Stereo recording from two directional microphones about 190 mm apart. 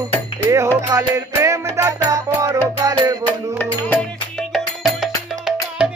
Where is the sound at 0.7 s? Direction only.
15° right (ahead or behind).